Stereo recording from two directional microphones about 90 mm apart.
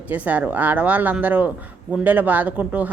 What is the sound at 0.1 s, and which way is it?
A woman's voice, 15° right (ahead or behind).